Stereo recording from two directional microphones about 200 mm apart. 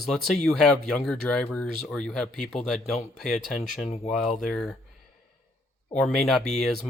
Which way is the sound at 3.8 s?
35° left (ahead or behind).